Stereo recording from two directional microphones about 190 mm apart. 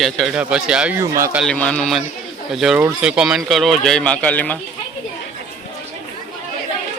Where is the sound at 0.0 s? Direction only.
Centre (ahead or behind).